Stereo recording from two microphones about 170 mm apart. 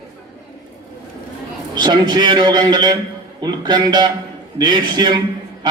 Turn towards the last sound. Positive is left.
turn(degrees=-25)  # may be behind; listen again after turning